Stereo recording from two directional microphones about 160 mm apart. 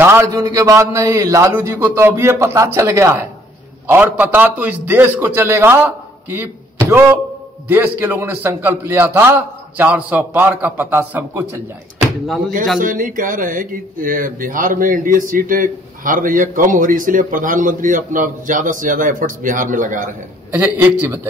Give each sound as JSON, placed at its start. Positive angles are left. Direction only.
{"t": 0.0, "sound": "a man's voice", "side_deg": -15}
{"t": 12.8, "sound": "speech", "side_deg": -55}
{"t": 20.5, "sound": "a man's voice", "side_deg": -15}